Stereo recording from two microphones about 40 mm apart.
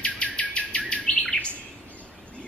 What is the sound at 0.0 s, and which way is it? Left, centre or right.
Bird, left.